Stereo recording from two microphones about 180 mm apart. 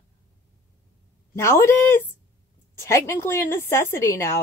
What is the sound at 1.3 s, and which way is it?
A woman's voice, 15° left (ahead or behind).